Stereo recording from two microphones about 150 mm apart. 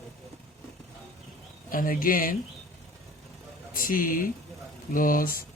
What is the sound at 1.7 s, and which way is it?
Speech, 70° left (ahead or behind).